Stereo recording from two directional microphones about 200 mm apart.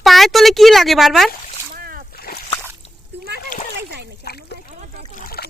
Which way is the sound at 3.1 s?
55° right (ahead or behind).